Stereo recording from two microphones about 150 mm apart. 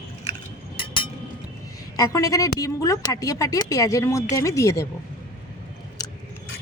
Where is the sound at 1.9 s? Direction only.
25° left (ahead or behind).